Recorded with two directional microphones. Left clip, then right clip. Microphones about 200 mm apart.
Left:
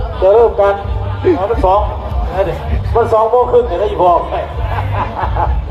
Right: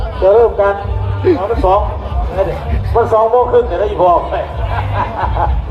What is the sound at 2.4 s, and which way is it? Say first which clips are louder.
A man's voice: even; 35° left (ahead or behind).